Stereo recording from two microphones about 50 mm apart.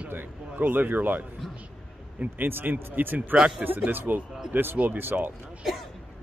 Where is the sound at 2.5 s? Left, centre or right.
Right.